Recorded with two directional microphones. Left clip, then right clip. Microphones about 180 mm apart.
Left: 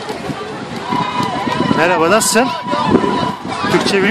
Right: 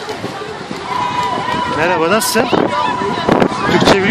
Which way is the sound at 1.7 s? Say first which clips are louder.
Left 2 dB; 10° left (ahead or behind).